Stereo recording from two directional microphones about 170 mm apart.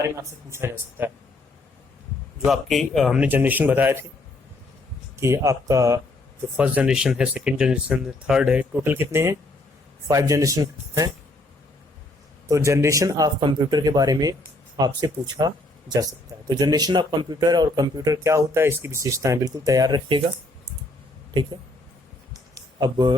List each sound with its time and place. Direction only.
0.0 s speech: 15° right (ahead or behind)
2.4 s speech: centre (ahead or behind)
5.1 s speech: 15° right (ahead or behind)
6.6 s speech: 5° right (ahead or behind)
12.5 s speech: 15° right (ahead or behind)
15.4 s speech: 25° right (ahead or behind)
22.5 s a sound: 25° right (ahead or behind)